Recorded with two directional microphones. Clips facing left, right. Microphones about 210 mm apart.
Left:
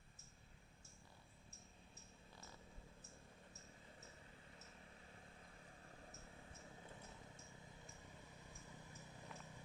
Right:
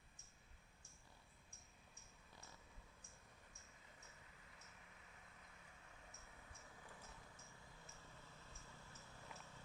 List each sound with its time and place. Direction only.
4.8 s vehicle: 35° left (ahead or behind); by 9.3 s 15° left (ahead or behind)